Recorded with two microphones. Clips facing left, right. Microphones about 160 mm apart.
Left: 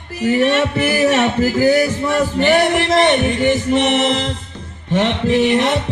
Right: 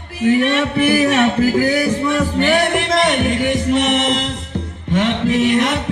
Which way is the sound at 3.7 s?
30° left (ahead or behind).